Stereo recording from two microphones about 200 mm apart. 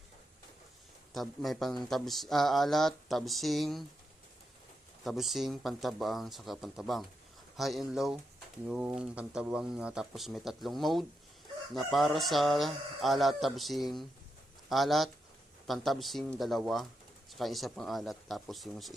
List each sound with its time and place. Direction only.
1.1 s speech: centre (ahead or behind)
5.0 s speech: centre (ahead or behind)